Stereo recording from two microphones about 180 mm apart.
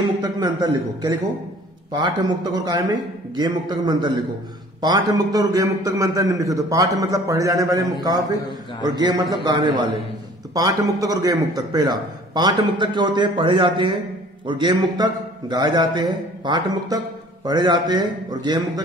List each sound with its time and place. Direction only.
0.2 s a man's voice: 20° right (ahead or behind)